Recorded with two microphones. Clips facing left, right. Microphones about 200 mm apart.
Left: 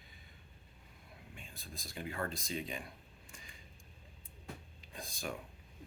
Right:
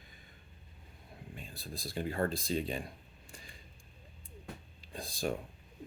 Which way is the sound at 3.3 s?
35° right (ahead or behind).